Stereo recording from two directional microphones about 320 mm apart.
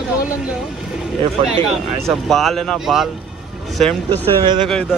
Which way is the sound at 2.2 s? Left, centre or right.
Centre.